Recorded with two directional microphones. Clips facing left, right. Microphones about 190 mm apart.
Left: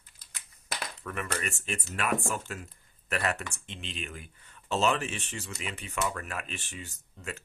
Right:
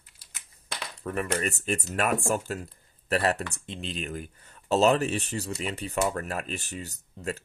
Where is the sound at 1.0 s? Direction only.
35° right (ahead or behind).